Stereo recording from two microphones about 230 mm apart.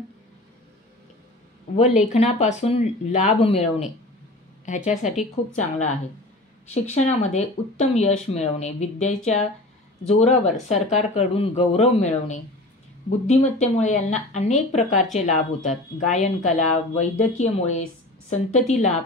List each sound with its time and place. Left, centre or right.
1.8 s speech: left